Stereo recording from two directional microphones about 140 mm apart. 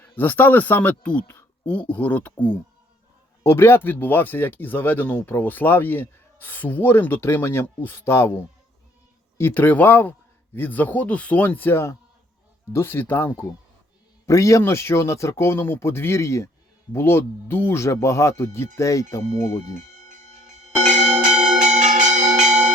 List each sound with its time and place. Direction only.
0.0 s speech: 15° left (ahead or behind)
9.4 s speech: 15° left (ahead or behind)
20.0 s music: 60° right (ahead or behind)
21.3 s music: 5° right (ahead or behind)
21.6 s bell: 60° right (ahead or behind)